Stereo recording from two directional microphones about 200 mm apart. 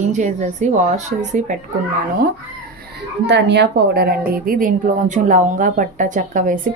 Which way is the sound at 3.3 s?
60° right (ahead or behind).